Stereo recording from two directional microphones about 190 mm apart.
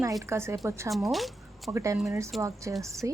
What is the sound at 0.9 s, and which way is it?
Speech, centre (ahead or behind).